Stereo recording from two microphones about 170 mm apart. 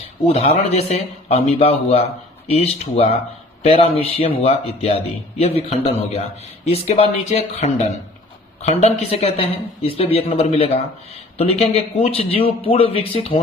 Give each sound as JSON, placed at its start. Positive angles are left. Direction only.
{"t": 0.3, "sound": "speech", "side_deg": 35}